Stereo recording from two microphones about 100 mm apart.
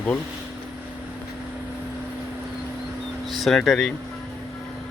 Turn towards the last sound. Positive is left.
turn(degrees=0)  # may be behind; listen again after turning